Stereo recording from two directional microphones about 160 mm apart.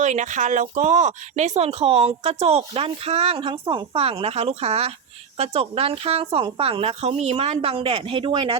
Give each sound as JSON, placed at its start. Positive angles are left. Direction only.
{"t": 0.0, "sound": "speech", "side_deg": -50}